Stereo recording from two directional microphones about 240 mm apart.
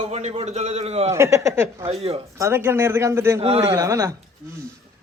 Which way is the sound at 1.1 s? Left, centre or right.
Centre.